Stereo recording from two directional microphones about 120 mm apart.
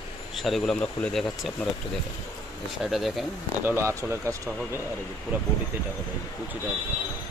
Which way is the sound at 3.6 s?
20° right (ahead or behind).